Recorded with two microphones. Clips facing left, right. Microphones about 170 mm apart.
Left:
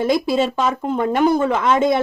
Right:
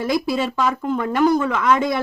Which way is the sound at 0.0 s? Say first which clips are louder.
Left 3 dB; 25° left (ahead or behind).